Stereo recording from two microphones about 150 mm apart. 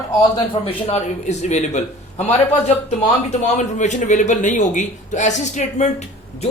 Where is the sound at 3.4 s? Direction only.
50° left (ahead or behind).